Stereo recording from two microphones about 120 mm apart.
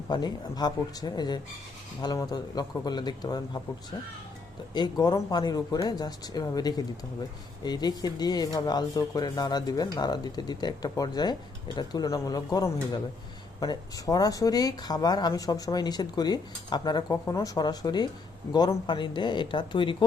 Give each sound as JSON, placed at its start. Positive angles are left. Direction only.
{"t": 0.1, "sound": "speech", "side_deg": 35}
{"t": 4.7, "sound": "speech", "side_deg": 35}